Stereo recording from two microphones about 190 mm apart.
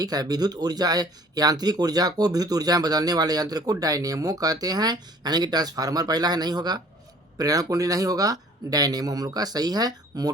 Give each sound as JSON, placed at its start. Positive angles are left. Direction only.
{"t": 0.0, "sound": "speech", "side_deg": -20}